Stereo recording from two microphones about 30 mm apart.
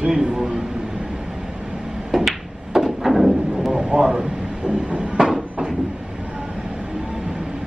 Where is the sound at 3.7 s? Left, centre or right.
Right.